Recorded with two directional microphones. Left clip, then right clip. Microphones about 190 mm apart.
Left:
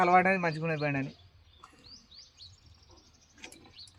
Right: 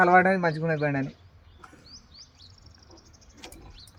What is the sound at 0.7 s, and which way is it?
Speech, 15° left (ahead or behind).